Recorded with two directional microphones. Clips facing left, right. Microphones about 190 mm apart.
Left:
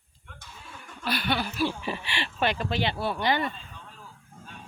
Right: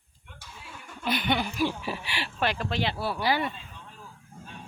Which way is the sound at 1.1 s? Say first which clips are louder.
Right 1 dB; 20° right (ahead or behind).